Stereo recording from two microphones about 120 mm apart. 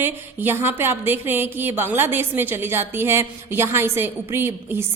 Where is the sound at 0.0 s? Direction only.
20° right (ahead or behind).